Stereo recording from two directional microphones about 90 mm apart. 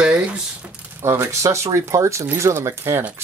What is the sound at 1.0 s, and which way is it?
Speech, 30° right (ahead or behind).